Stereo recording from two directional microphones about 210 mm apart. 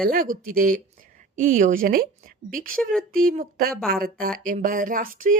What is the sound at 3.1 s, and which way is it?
A woman's voice, 45° right (ahead or behind).